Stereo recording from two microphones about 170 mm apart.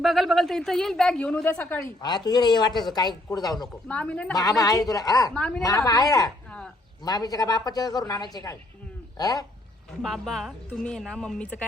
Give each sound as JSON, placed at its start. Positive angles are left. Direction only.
{"t": 0.0, "sound": "speech", "side_deg": 0}
{"t": 2.0, "sound": "speech", "side_deg": 25}
{"t": 3.8, "sound": "speech", "side_deg": 10}
{"t": 4.4, "sound": "speech", "side_deg": 20}
{"t": 5.3, "sound": "speech", "side_deg": 5}
{"t": 5.6, "sound": "speech", "side_deg": 20}
{"t": 10.0, "sound": "speech", "side_deg": 0}